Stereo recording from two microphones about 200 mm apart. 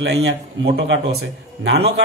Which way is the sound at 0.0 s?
60° right (ahead or behind).